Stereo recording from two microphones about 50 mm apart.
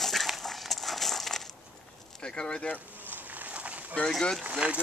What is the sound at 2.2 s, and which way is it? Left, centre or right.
Speech, centre.